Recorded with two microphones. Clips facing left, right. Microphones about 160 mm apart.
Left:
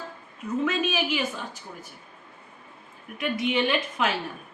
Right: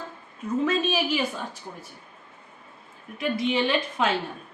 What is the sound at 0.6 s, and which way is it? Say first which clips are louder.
Speech: right 2 dB; 35° right (ahead or behind).